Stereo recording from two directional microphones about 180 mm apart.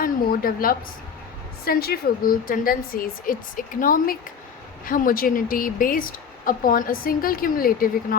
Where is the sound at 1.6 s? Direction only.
60° left (ahead or behind).